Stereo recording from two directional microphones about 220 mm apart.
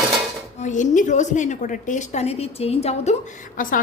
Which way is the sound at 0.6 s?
35° left (ahead or behind).